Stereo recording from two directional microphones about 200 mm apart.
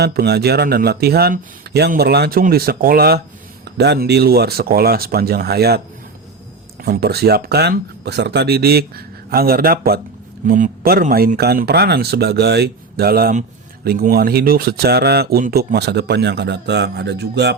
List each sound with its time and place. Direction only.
0.0 s speech: 50° right (ahead or behind)
6.8 s speech: 50° right (ahead or behind)